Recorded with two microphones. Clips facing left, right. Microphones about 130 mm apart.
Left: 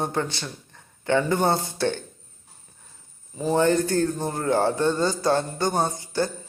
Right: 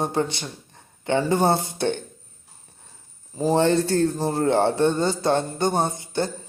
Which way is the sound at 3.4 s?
30° right (ahead or behind).